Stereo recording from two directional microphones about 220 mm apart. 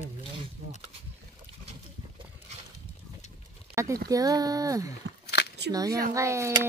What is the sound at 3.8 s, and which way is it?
Speech, 15° right (ahead or behind).